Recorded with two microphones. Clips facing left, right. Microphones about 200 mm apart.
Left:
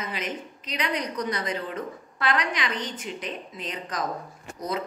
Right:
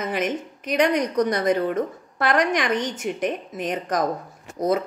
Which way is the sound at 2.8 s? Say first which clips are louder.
Right 7 dB; 75° right (ahead or behind).